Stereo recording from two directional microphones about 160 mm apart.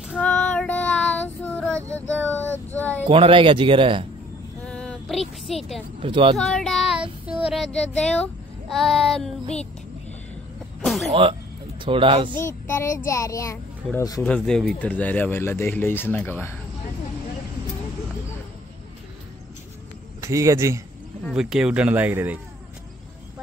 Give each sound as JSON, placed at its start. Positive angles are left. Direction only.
{"t": 0.2, "sound": "child singing", "side_deg": 5}
{"t": 3.1, "sound": "speech", "side_deg": -35}
{"t": 4.6, "sound": "a sound", "side_deg": 5}
{"t": 5.9, "sound": "speech", "side_deg": -30}
{"t": 6.3, "sound": "child singing", "side_deg": 5}
{"t": 8.0, "sound": "a child's voice", "side_deg": 5}
{"t": 10.8, "sound": "music", "side_deg": 0}
{"t": 11.1, "sound": "speech", "side_deg": -35}
{"t": 12.6, "sound": "a child's voice", "side_deg": 15}
{"t": 14.2, "sound": "speech", "side_deg": 5}
{"t": 20.2, "sound": "speech", "side_deg": -20}
{"t": 21.3, "sound": "speech", "side_deg": -5}